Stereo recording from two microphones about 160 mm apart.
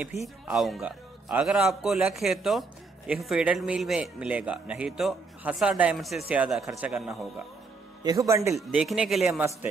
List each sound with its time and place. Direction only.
0.2 s a man's voice: centre (ahead or behind)
8.0 s a man's voice: 20° right (ahead or behind)
8.5 s a man's voice: centre (ahead or behind)